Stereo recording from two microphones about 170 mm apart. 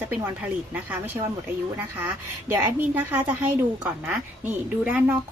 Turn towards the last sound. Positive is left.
turn(degrees=-10)  # may be behind; listen again after turning